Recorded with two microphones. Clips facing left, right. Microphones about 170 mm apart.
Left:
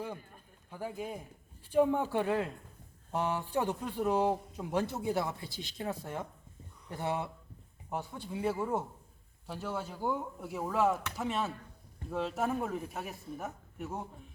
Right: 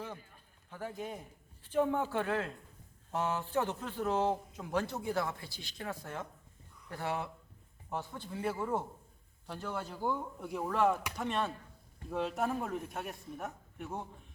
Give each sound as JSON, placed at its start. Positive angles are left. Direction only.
{"t": 0.7, "sound": "speech", "side_deg": 10}